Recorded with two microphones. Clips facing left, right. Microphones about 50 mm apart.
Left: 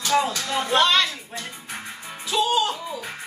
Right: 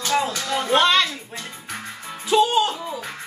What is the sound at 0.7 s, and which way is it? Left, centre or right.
Speech, right.